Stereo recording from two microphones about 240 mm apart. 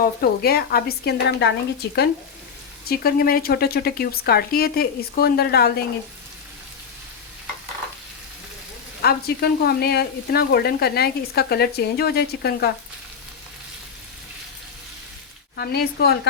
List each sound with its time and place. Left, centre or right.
0.0 s speech: left
1.8 s frying: left
2.9 s speech: left
9.0 s speech: left
15.5 s speech: left